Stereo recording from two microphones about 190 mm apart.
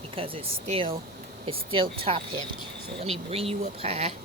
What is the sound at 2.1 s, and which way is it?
Speech, 30° right (ahead or behind).